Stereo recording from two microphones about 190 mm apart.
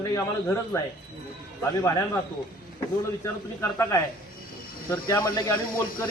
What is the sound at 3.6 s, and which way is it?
Speech, 15° left (ahead or behind).